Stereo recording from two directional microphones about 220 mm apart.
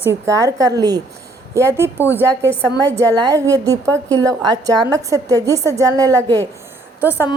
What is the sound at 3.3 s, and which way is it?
A woman's voice, 15° right (ahead or behind).